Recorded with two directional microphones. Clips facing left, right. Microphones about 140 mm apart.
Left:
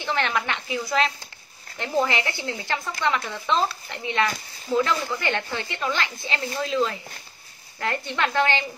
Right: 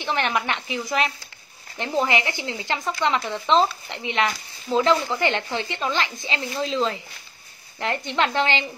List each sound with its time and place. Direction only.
0.0 s speech: 20° right (ahead or behind)